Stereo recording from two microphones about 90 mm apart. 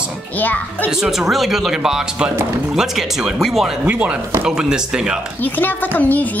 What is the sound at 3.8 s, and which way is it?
Speech, 15° right (ahead or behind).